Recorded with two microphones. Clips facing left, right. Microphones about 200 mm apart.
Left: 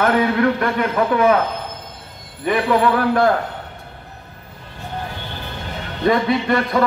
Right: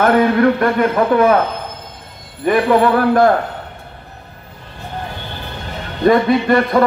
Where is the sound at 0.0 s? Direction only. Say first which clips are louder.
Right 4 dB; 50° right (ahead or behind).